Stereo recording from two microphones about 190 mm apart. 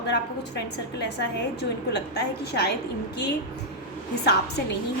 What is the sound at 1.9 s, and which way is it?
Speech, 60° left (ahead or behind).